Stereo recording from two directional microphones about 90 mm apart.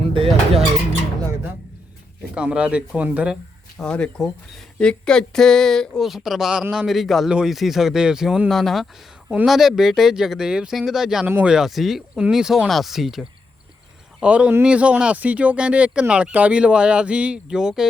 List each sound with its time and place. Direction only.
0.0 s speech: 85° right
2.3 s speech: 10° right (ahead or behind)
3.8 s speech: 10° left (ahead or behind)
6.1 s a man's voice: 5° right (ahead or behind)